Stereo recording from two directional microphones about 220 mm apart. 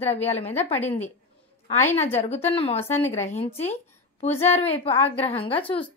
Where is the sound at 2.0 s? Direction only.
30° left (ahead or behind).